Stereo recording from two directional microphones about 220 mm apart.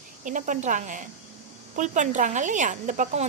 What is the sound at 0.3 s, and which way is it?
Speech, 35° right (ahead or behind).